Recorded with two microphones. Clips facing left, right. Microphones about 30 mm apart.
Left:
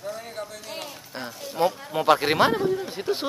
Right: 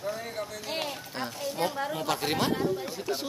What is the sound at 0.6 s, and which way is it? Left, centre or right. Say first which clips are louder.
Music: right 3 dB; right.